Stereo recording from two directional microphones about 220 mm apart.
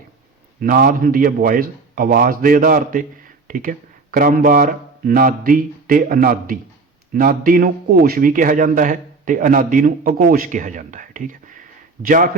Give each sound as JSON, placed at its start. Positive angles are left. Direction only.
{"t": 0.6, "sound": "a man's voice", "side_deg": -40}